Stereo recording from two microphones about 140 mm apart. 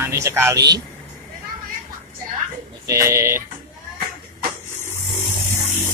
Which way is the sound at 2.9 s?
25° right (ahead or behind).